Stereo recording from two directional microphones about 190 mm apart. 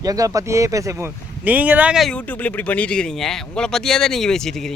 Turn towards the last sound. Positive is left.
turn(degrees=0)  # may be behind; listen again after turning